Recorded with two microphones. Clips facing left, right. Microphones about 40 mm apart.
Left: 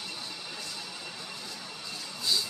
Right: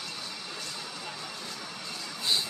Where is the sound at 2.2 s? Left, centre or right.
Right.